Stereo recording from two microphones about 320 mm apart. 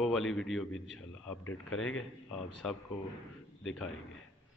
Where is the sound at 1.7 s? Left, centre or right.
Left.